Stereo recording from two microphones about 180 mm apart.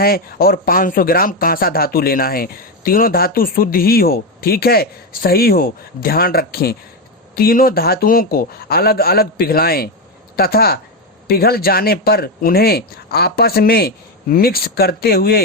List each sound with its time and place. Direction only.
0.0 s speech: 55° left (ahead or behind)